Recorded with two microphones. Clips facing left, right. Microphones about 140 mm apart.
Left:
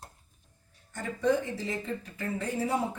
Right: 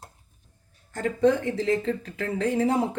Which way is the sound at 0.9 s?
90° right.